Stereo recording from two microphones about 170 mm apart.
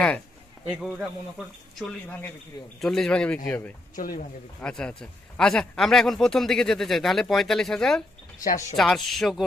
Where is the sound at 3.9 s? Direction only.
55° left (ahead or behind).